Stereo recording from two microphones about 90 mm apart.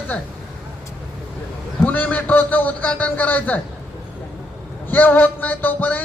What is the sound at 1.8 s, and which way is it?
Speech, 20° left (ahead or behind).